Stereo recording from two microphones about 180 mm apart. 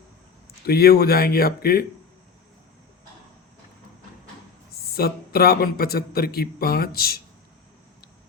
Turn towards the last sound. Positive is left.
turn(degrees=60)  # may be behind; listen again after turning